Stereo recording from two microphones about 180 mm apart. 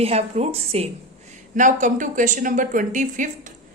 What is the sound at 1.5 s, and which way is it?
A woman's voice, 45° right (ahead or behind).